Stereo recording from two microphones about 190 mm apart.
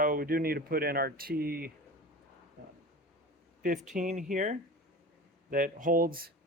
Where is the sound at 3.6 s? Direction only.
40° right (ahead or behind).